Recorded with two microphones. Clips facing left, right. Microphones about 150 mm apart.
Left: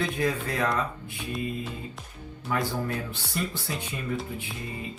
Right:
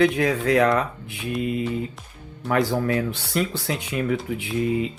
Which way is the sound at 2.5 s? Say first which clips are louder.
Right 8 dB; 75° right (ahead or behind).